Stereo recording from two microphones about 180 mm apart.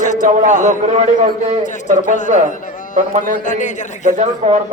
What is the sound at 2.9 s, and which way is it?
Speech, 45° right (ahead or behind).